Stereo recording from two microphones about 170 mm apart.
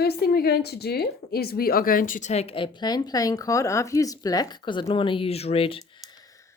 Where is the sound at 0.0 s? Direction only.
65° left (ahead or behind); by 5.8 s 35° left (ahead or behind).